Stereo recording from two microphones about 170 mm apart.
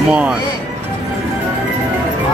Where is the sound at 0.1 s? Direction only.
5° right (ahead or behind).